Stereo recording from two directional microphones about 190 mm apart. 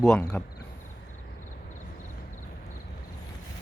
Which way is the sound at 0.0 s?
5° left (ahead or behind).